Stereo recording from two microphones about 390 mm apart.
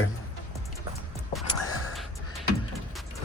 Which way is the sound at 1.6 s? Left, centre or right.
Left.